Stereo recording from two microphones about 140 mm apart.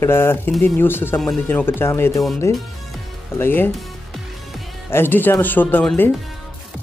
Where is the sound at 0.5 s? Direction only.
Centre (ahead or behind).